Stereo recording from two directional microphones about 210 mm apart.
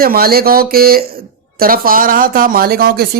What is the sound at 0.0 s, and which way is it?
Speech, 45° right (ahead or behind).